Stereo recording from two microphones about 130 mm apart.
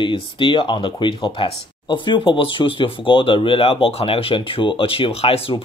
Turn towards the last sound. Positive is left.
turn(degrees=45)  # may be behind; listen again after turning